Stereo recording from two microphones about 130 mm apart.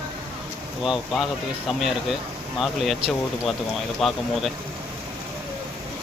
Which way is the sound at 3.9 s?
Centre (ahead or behind).